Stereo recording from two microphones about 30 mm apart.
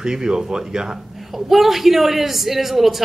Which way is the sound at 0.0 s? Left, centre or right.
Right.